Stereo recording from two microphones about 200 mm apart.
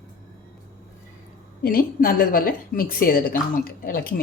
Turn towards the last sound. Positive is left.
turn(degrees=45)  # may be behind; listen again after turning